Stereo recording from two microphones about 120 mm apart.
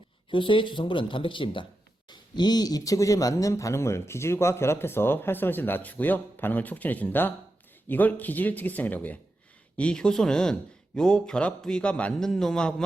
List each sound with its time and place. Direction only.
0.3 s speech: 45° left (ahead or behind); by 12.7 s 5° left (ahead or behind)